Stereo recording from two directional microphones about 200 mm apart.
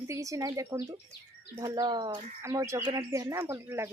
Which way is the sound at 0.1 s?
15° right (ahead or behind).